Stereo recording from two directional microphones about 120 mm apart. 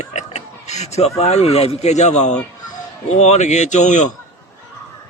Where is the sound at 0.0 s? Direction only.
70° left (ahead or behind); by 4.1 s 85° left.